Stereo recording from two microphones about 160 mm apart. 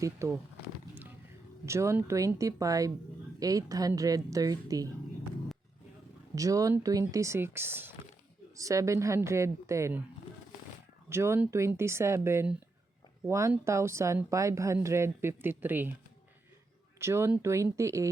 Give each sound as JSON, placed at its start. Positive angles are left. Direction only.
{"t": 0.2, "sound": "speech", "side_deg": -20}
{"t": 1.6, "sound": "speech", "side_deg": -15}
{"t": 6.3, "sound": "speech", "side_deg": -20}
{"t": 11.1, "sound": "speech", "side_deg": -15}
{"t": 17.0, "sound": "speech", "side_deg": -15}